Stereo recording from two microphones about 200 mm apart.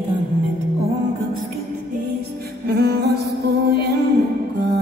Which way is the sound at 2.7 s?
50° right (ahead or behind).